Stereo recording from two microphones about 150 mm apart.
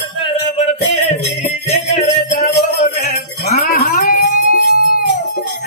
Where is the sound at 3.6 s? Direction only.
80° left.